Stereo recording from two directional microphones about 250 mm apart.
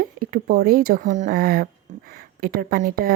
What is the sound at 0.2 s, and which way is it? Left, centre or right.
Speech, right.